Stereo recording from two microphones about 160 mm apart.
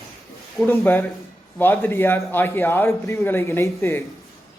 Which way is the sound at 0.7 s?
15° left (ahead or behind).